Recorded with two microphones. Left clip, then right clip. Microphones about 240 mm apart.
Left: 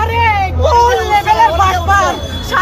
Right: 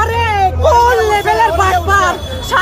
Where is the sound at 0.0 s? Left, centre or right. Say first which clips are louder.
Left 1 dB; right.